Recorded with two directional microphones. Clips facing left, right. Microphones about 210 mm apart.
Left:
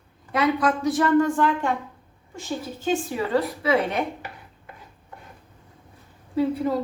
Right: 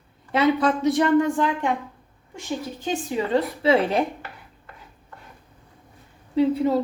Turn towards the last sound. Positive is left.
turn(degrees=-25)  # may be behind; listen again after turning